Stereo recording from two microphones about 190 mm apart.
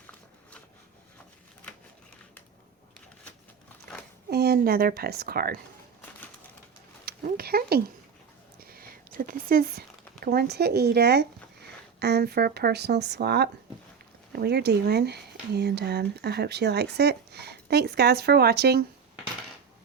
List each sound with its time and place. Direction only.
4.3 s a woman's voice: 55° right (ahead or behind)
7.0 s a sound: 55° right (ahead or behind)
8.5 s speech: 50° right (ahead or behind)